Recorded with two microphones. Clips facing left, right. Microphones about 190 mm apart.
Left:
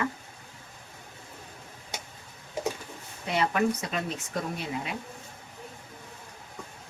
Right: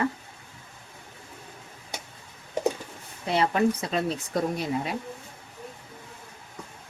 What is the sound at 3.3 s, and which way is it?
Speech, 30° right (ahead or behind).